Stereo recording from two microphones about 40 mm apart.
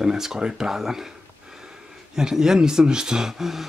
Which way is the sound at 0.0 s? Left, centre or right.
Centre.